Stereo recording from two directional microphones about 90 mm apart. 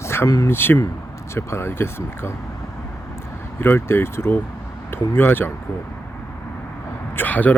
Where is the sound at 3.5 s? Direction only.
25° left (ahead or behind).